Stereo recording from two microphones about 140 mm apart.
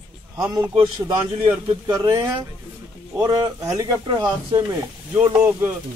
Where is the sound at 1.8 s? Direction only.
30° right (ahead or behind).